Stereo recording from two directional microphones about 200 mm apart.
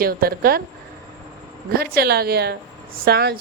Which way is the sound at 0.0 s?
50° right (ahead or behind).